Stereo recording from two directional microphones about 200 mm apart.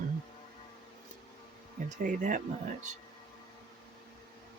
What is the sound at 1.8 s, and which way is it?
Speech, 40° right (ahead or behind).